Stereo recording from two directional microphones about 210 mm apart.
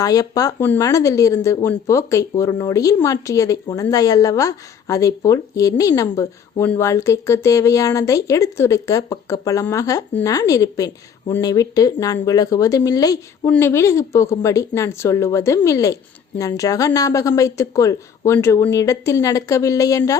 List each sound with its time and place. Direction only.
0.0 s speech: 15° left (ahead or behind)